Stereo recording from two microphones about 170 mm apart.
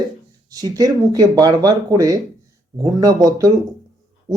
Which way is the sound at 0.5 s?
20° right (ahead or behind).